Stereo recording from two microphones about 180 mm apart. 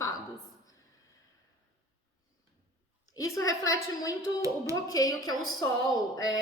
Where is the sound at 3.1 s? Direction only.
20° left (ahead or behind).